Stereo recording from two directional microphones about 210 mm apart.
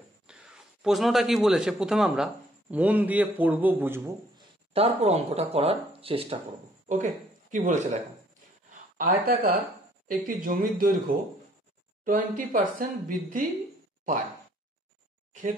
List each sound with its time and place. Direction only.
0.3 s a man's voice: centre (ahead or behind)
4.7 s speech: 30° right (ahead or behind)
8.6 s a sound: 40° right (ahead or behind)
10.0 s speech: 40° right (ahead or behind)